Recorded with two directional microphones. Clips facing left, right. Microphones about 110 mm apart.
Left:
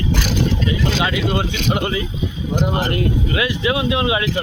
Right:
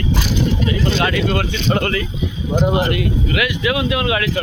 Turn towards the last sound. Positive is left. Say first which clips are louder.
# even
turn(degrees=25)  # may be behind; listen again after turning